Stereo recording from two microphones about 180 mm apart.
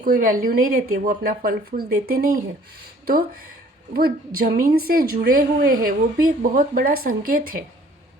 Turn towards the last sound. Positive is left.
turn(degrees=-55)  # may be behind; listen again after turning